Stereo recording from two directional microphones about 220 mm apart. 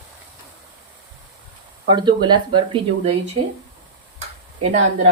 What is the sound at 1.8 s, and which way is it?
Speech, 20° right (ahead or behind).